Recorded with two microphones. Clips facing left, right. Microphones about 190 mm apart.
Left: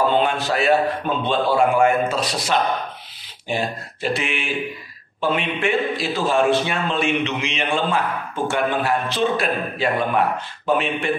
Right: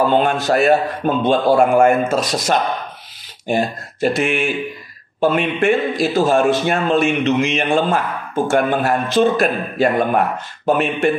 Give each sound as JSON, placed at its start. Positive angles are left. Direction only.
{"t": 0.2, "sound": "a man's voice", "side_deg": -45}